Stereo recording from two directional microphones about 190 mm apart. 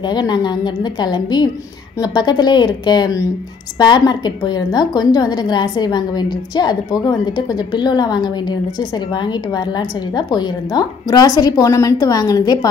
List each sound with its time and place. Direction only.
0.0 s a woman's voice: 20° left (ahead or behind)